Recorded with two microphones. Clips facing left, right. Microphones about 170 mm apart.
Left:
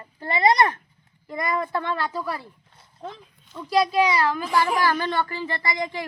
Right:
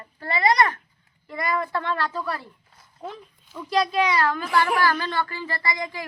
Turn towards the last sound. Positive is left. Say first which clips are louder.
# left 2 dB
turn(degrees=20)  # may be behind; listen again after turning